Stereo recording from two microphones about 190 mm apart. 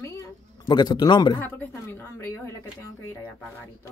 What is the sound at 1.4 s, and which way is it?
A woman's voice, 10° left (ahead or behind).